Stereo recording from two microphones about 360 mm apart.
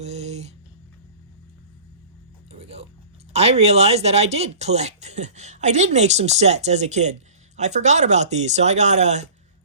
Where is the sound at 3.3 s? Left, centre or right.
Centre.